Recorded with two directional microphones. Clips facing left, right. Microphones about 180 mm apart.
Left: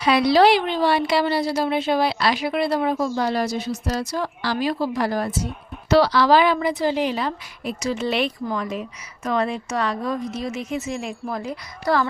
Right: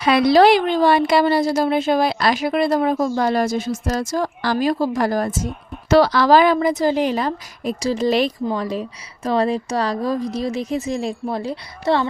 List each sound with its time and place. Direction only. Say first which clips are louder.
0.0 s speech: right 3 dB; 50° right (ahead or behind); by 12.0 s 30° right (ahead or behind)